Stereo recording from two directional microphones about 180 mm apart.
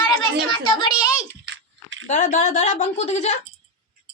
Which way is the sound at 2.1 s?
40° left (ahead or behind).